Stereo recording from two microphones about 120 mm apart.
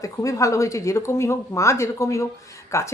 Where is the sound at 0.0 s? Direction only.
25° left (ahead or behind).